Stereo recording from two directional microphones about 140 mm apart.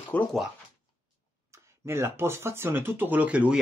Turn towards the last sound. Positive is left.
turn(degrees=-10)  # may be behind; listen again after turning